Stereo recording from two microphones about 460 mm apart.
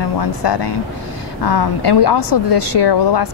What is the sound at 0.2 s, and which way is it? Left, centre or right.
A woman's voice, left.